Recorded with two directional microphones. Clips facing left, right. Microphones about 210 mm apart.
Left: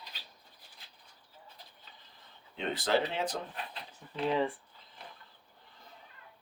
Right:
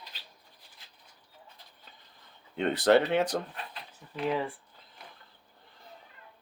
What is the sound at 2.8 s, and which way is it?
Speech, 70° right (ahead or behind).